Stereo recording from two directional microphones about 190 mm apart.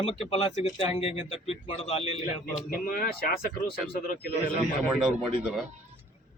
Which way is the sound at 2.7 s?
50° left (ahead or behind).